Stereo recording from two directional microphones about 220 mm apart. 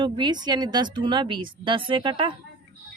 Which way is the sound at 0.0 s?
20° right (ahead or behind).